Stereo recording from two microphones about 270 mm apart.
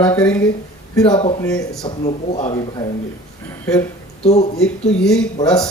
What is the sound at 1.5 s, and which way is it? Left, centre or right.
Speech, centre.